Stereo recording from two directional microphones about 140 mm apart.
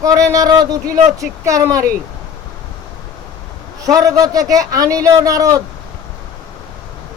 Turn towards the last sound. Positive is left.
turn(degrees=-25)  # may be behind; listen again after turning